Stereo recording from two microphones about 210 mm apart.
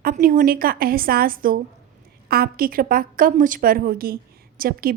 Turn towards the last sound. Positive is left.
turn(degrees=-45)  # may be behind; listen again after turning